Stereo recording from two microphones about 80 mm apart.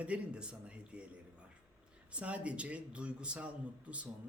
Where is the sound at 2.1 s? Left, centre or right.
Centre.